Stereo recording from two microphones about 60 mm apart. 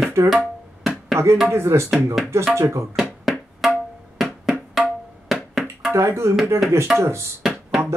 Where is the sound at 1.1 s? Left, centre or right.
Right.